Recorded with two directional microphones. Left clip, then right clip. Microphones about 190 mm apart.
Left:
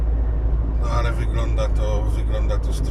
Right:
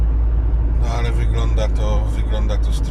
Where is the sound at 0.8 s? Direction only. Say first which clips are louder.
Even; 15° right (ahead or behind).